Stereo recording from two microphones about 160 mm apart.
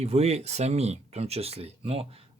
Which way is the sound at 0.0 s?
40° right (ahead or behind).